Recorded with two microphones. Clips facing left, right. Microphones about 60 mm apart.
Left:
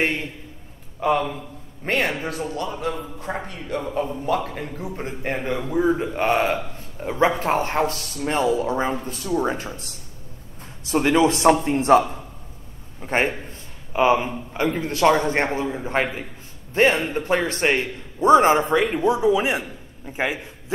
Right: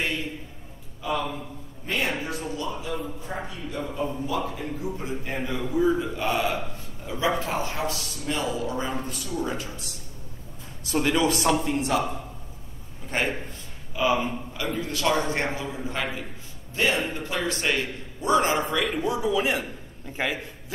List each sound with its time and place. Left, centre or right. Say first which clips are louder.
1.0 s a man's voice: left 7 dB; left
10.9 s a man's voice: left 5 dB; left
13.0 s a man's voice: left 5 dB; left